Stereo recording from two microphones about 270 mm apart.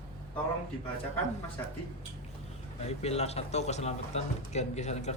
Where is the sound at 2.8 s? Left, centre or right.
Left.